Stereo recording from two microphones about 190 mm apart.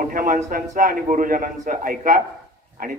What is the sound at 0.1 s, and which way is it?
A man's voice, 45° right (ahead or behind).